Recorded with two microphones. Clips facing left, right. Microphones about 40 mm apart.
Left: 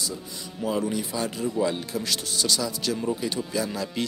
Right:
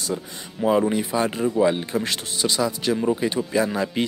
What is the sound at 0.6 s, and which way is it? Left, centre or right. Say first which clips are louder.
Speech: right 7 dB; right.